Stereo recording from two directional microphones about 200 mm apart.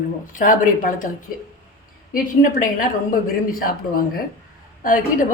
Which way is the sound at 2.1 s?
45° left (ahead or behind).